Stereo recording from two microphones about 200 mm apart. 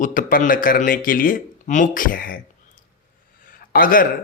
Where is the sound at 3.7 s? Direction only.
45° left (ahead or behind).